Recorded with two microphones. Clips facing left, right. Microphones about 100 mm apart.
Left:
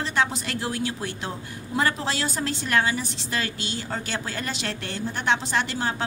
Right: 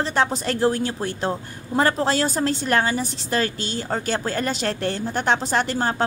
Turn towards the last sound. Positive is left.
turn(degrees=-40)  # may be behind; listen again after turning